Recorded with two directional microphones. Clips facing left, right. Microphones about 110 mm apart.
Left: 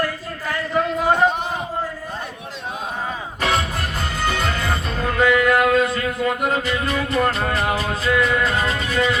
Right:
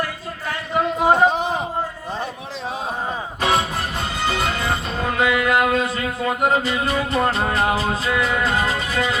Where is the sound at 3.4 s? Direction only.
20° right (ahead or behind).